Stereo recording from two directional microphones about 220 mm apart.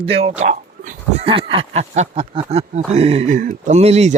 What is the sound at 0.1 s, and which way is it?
Speech, 30° right (ahead or behind).